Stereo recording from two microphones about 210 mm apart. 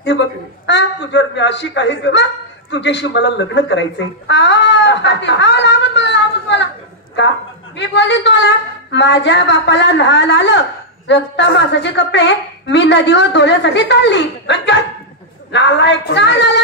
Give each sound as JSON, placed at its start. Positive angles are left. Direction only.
{"t": 0.7, "sound": "a woman's voice", "side_deg": 55}
{"t": 4.3, "sound": "a sound", "side_deg": 55}
{"t": 7.7, "sound": "a woman's voice", "side_deg": 55}